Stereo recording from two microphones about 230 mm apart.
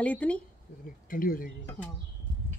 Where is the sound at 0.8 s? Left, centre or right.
Left.